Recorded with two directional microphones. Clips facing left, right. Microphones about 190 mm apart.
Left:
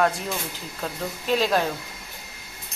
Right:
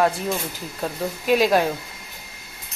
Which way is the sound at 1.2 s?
10° right (ahead or behind).